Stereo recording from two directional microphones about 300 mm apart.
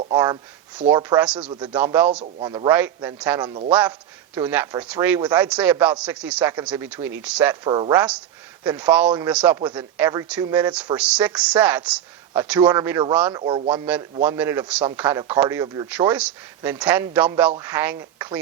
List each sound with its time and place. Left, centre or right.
0.0 s a man's voice: centre
1.5 s a man's voice: centre
2.2 s a man's voice: centre
7.6 s a man's voice: centre
7.9 s a man's voice: centre
13.4 s a man's voice: centre